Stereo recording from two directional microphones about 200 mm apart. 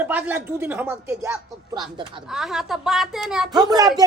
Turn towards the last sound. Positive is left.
turn(degrees=-20)  # may be behind; listen again after turning